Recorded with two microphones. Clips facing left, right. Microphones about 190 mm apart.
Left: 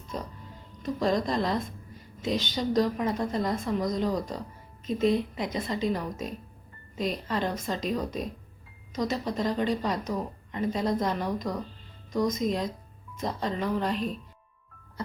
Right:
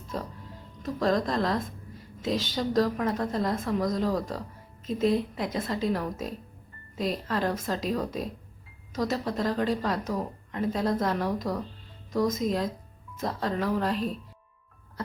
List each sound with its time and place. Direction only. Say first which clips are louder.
0.8 s speech: right 1 dB; centre (ahead or behind)